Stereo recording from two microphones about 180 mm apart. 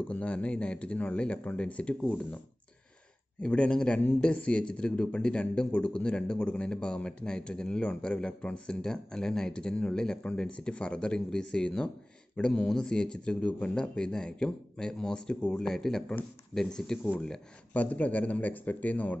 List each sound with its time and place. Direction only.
0.1 s speech: 5° left (ahead or behind)
3.4 s speech: 5° left (ahead or behind)